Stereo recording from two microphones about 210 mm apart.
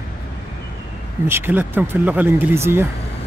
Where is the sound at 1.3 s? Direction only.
10° right (ahead or behind).